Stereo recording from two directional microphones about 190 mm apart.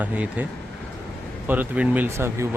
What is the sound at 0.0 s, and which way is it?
Speech, 10° right (ahead or behind).